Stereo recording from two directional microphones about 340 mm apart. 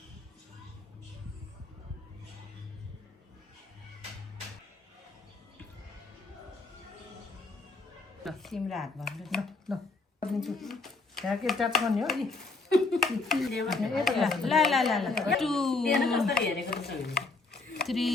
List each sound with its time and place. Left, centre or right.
8.2 s speech: centre
16.3 s speech: left
17.8 s speech: centre